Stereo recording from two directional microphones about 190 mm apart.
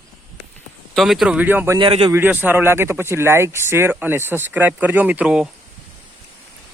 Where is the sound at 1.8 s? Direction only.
30° right (ahead or behind).